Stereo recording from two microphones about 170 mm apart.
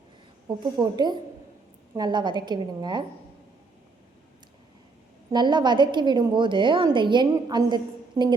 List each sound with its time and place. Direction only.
0.4 s a woman's voice: 25° right (ahead or behind)
5.3 s a woman's voice: 25° right (ahead or behind)